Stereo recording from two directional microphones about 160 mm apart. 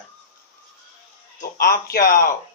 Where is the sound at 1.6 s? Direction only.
70° left (ahead or behind).